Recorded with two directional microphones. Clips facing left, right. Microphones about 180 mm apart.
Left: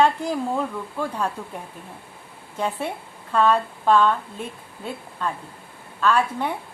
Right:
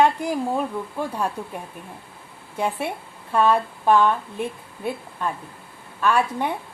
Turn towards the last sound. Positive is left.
turn(degrees=-15)  # may be behind; listen again after turning